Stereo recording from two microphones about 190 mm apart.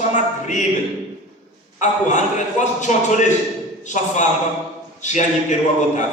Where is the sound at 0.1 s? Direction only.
40° left (ahead or behind).